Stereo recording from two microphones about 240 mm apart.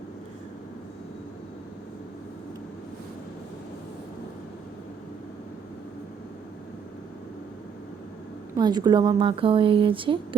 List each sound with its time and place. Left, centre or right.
8.5 s speech: centre